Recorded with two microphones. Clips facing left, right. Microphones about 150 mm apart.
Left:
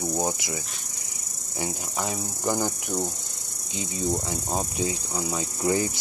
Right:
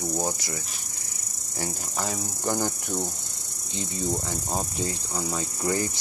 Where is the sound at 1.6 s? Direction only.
10° left (ahead or behind).